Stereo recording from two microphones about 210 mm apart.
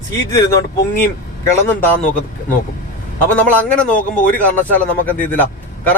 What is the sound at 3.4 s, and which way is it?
Speech, 10° left (ahead or behind).